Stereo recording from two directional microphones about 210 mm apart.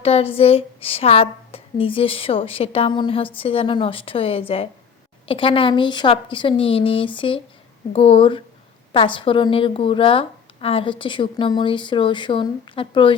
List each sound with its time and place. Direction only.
0.0 s a woman's voice: 30° left (ahead or behind)